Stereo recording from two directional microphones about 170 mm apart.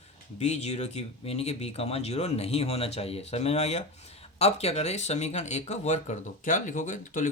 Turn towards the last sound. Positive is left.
turn(degrees=50)  # may be behind; listen again after turning